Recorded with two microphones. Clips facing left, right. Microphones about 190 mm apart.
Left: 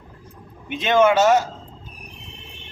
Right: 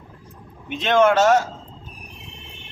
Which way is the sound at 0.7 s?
5° left (ahead or behind).